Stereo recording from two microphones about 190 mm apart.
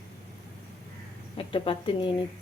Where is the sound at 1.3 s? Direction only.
30° left (ahead or behind).